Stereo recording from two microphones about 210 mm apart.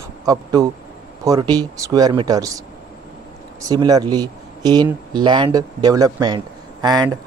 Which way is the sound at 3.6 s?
20° right (ahead or behind).